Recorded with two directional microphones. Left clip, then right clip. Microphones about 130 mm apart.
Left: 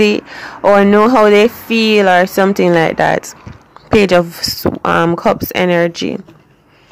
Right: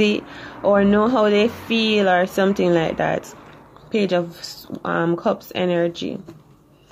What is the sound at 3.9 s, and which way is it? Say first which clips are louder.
Speech: left 11 dB; 50° left (ahead or behind).